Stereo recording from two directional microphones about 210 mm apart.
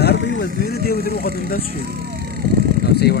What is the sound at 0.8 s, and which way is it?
Vehicle, 45° left (ahead or behind).